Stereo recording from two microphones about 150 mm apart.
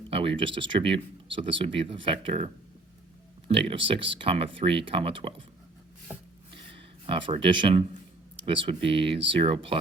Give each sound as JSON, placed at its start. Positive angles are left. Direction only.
{"t": 0.1, "sound": "speech", "side_deg": -40}
{"t": 3.5, "sound": "speech", "side_deg": -35}
{"t": 6.7, "sound": "speech", "side_deg": -35}